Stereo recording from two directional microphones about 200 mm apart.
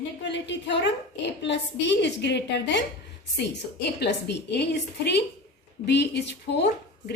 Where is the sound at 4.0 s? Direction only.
60° left (ahead or behind).